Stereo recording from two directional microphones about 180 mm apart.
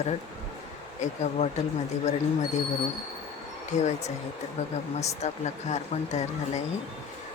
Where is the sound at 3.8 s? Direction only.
40° left (ahead or behind).